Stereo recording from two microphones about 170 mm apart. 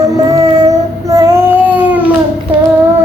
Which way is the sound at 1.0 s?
20° right (ahead or behind).